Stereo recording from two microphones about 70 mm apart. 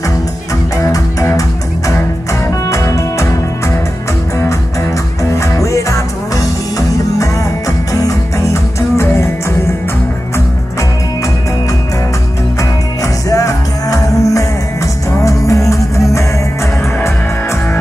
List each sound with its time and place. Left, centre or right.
0.7 s music: left
2.7 s music: left
5.3 s music: left
8.9 s music: left
13.0 s music: left